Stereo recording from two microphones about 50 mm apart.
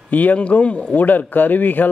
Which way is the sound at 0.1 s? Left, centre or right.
Left.